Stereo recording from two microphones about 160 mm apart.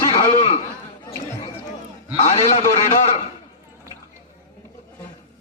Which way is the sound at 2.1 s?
40° left (ahead or behind).